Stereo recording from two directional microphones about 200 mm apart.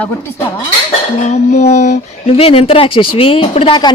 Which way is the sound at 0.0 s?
10° left (ahead or behind).